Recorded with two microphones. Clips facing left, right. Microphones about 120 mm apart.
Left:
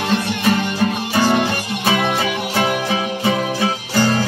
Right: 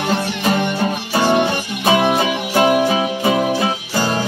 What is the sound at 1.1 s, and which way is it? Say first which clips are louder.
Music: right 3 dB; 30° right (ahead or behind).